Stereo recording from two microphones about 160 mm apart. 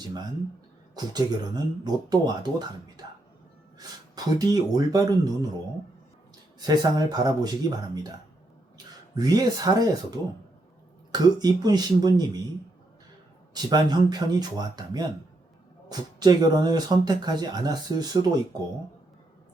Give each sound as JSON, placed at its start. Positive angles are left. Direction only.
{"t": 0.0, "sound": "speech", "side_deg": -25}
{"t": 3.8, "sound": "speech", "side_deg": -25}
{"t": 6.6, "sound": "speech", "side_deg": -25}
{"t": 9.1, "sound": "speech", "side_deg": -25}
{"t": 13.5, "sound": "speech", "side_deg": -25}